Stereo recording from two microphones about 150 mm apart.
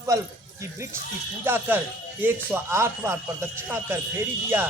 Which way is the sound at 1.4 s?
15° right (ahead or behind).